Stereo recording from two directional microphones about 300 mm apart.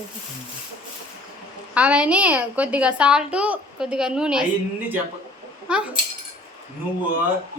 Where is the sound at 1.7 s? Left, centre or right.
Centre.